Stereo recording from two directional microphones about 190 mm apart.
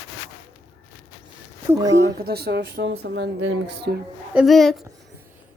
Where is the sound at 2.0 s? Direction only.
55° right (ahead or behind).